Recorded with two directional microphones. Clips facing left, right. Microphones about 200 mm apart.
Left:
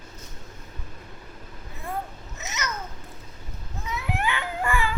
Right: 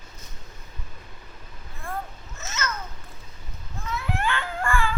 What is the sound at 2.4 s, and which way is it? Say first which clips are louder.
Babbling: right 1 dB; 15° left (ahead or behind).